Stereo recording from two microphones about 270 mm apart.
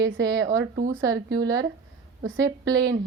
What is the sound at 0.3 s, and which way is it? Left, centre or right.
Speech, centre.